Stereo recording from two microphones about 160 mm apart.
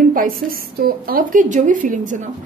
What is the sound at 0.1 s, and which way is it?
A woman's voice, 60° right (ahead or behind).